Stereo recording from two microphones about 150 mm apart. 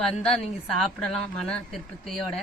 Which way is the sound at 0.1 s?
5° left (ahead or behind).